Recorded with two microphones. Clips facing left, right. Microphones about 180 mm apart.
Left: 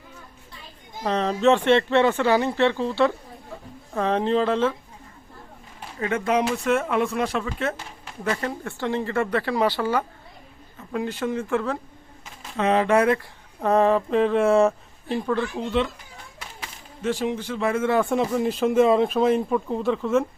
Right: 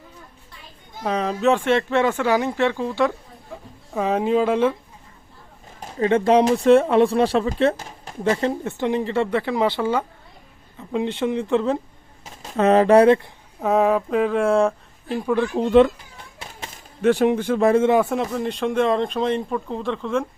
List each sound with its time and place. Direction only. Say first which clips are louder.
1.0 s speech: even; 5° right (ahead or behind)
5.8 s speech: right 7 dB; 30° right (ahead or behind)
8.2 s speech: right 6 dB; 25° right (ahead or behind)
12.2 s speech: right 5 dB; 40° right (ahead or behind)
13.6 s speech: right 1 dB; 5° right (ahead or behind)
15.5 s speech: right 10 dB; 45° right (ahead or behind)
17.0 s speech: right 8 dB; 60° right (ahead or behind)
18.0 s speech: left 1 dB; centre (ahead or behind)